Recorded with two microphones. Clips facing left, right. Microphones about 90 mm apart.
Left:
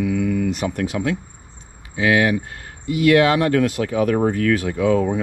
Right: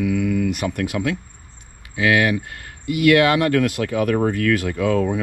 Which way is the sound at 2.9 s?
70° right (ahead or behind).